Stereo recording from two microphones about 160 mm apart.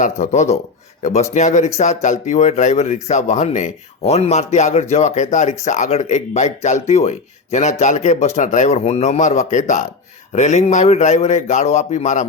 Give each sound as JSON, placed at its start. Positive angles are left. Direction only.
{"t": 0.0, "sound": "speech", "side_deg": 50}